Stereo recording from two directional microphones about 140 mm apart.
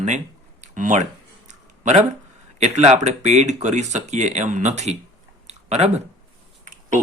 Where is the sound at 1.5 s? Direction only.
55° right (ahead or behind).